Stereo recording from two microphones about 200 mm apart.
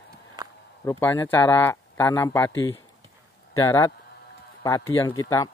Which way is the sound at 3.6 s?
15° left (ahead or behind).